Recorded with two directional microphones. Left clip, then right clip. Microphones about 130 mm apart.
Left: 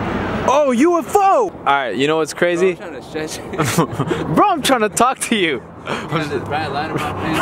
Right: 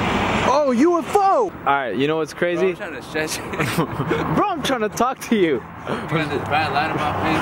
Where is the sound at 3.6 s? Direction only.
35° left (ahead or behind).